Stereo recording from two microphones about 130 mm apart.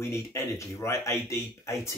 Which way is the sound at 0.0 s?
20° left (ahead or behind).